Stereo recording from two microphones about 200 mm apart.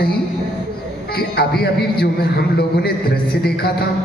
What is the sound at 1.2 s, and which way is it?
A man's voice, 50° left (ahead or behind).